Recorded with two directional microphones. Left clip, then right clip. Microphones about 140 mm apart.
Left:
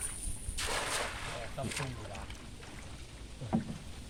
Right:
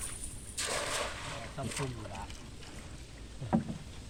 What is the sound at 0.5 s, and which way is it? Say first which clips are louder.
Boat: even; centre (ahead or behind).